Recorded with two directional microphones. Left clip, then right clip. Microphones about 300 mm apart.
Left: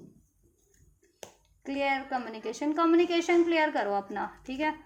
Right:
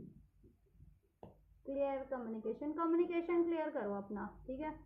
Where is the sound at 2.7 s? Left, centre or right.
Left.